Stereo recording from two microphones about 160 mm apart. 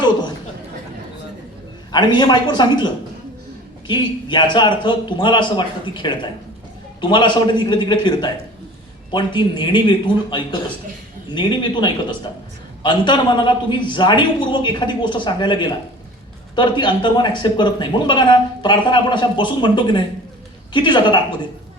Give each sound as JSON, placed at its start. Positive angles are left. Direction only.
{"t": 1.9, "sound": "speech", "side_deg": 30}
{"t": 3.8, "sound": "speech", "side_deg": 30}